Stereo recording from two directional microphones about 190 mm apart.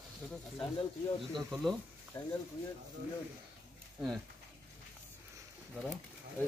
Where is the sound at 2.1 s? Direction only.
15° left (ahead or behind).